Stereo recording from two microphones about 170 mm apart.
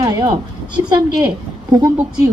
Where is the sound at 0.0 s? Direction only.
25° right (ahead or behind).